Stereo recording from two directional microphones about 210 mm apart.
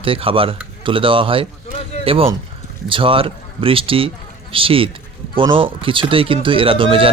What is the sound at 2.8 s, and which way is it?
Speech, 25° right (ahead or behind).